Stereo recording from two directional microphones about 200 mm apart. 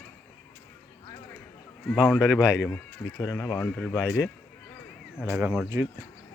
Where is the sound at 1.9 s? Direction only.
5° right (ahead or behind).